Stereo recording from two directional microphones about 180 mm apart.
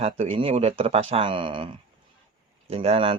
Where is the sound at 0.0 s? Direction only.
35° right (ahead or behind).